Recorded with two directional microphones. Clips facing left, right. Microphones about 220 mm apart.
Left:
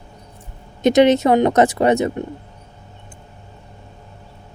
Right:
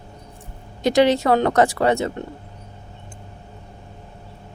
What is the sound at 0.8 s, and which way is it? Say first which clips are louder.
Speech: left 4 dB; 20° left (ahead or behind).